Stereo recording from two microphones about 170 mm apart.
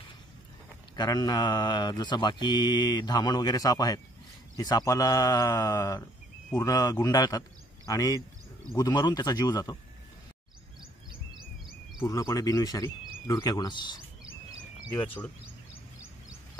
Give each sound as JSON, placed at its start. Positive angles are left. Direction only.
{"t": 0.9, "sound": "a man's voice", "side_deg": 25}
{"t": 12.0, "sound": "speech", "side_deg": 20}